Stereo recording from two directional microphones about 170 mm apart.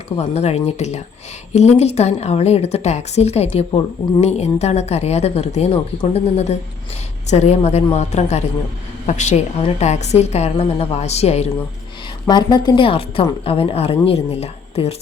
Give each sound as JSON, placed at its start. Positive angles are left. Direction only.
{"t": 0.2, "sound": "a woman's voice", "side_deg": 40}
{"t": 12.3, "sound": "a woman's voice", "side_deg": 25}